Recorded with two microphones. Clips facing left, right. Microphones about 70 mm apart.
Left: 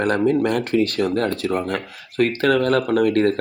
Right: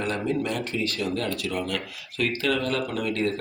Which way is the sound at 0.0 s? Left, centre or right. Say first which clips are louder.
Left 9 dB; left.